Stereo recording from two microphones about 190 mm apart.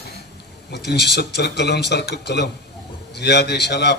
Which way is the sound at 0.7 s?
60° left (ahead or behind).